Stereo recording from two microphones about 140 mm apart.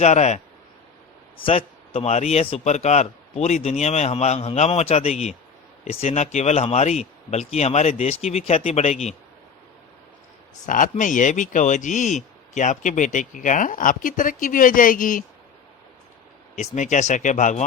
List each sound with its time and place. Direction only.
0.0 s speech: 55° left (ahead or behind)
1.4 s a man's voice: 40° left (ahead or behind)
10.7 s speech: 70° left (ahead or behind)
16.6 s speech: 60° left (ahead or behind)